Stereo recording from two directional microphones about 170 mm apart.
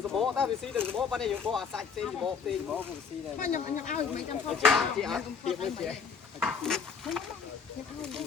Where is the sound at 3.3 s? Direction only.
50° left (ahead or behind).